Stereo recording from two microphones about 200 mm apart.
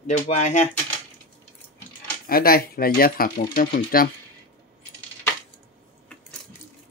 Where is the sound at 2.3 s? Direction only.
45° left (ahead or behind).